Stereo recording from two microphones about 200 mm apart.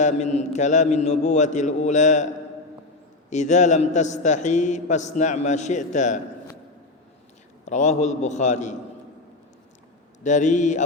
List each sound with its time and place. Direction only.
0.0 s a man's voice: 35° left (ahead or behind)
3.2 s a man's voice: 35° left (ahead or behind)
7.6 s a man's voice: 35° left (ahead or behind)
10.2 s a man's voice: 35° left (ahead or behind)